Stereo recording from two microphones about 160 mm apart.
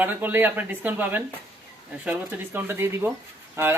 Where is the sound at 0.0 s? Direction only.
10° right (ahead or behind).